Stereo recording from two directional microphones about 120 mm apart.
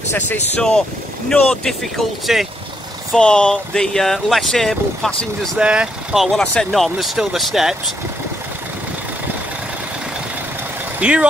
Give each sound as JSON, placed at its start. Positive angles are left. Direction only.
{"t": 0.6, "sound": "speech", "side_deg": 5}
{"t": 5.6, "sound": "speech", "side_deg": -10}
{"t": 11.0, "sound": "speech", "side_deg": -10}